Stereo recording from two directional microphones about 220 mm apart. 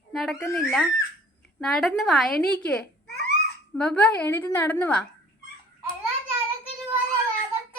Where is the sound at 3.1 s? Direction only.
45° left (ahead or behind).